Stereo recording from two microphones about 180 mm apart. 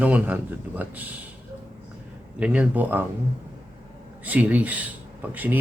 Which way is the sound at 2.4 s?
5° right (ahead or behind).